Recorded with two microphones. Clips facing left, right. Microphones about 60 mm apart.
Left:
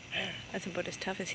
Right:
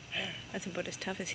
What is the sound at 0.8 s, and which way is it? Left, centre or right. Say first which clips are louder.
Speech: left 1 dB; centre.